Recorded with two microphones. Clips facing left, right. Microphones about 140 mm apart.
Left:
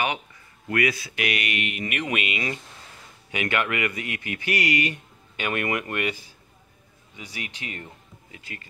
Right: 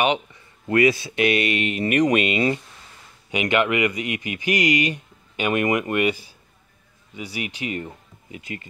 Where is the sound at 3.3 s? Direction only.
20° right (ahead or behind).